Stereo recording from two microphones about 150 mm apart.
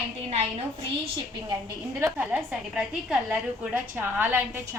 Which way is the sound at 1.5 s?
20° right (ahead or behind).